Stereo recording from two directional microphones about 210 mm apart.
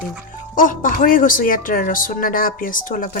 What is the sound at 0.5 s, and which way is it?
Speech, 40° left (ahead or behind).